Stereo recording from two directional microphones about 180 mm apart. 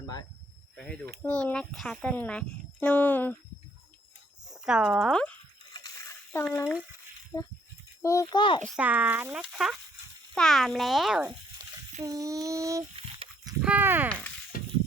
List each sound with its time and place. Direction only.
1.2 s speech: 10° left (ahead or behind)
4.6 s a child's voice: 5° right (ahead or behind)
5.7 s splash: 20° left (ahead or behind)
8.0 s a child's voice: 15° left (ahead or behind)
8.6 s a child's voice: 5° right (ahead or behind)
12.0 s speech: 20° right (ahead or behind)
13.2 s a sound: 30° right (ahead or behind)
13.6 s speech: 10° right (ahead or behind)
14.5 s a sound: 50° left (ahead or behind)